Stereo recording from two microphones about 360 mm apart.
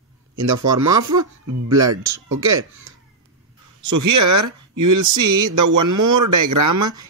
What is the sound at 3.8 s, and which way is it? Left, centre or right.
Speech, right.